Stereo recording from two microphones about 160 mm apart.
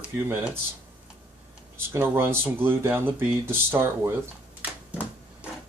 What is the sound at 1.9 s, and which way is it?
Speech, 15° right (ahead or behind).